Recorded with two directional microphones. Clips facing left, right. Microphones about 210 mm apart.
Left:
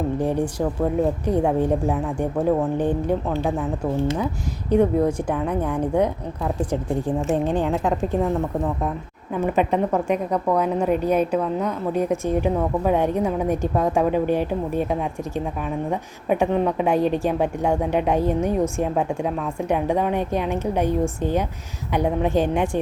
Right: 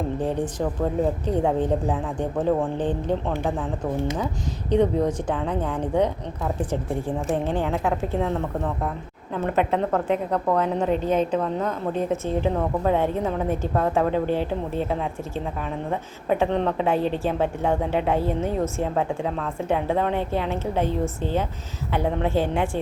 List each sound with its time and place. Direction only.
0.2 s a woman's voice: 10° left (ahead or behind)
4.7 s a woman's voice: 10° left (ahead or behind)
7.3 s a woman's voice: 15° left (ahead or behind)